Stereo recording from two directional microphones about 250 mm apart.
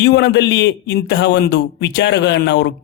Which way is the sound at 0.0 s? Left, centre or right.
Left.